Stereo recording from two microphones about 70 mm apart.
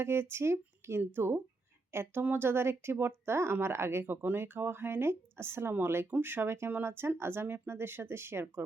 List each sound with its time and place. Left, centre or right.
0.0 s speech: right